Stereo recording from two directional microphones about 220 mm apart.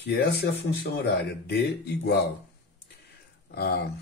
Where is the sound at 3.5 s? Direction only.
45° left (ahead or behind).